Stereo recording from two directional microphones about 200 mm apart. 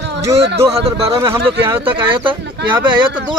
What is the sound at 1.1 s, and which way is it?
Speech, 15° right (ahead or behind).